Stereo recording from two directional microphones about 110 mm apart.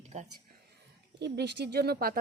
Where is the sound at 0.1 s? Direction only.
80° right.